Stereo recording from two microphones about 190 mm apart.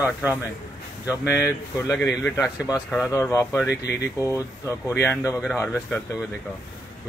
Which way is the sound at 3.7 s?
60° left (ahead or behind).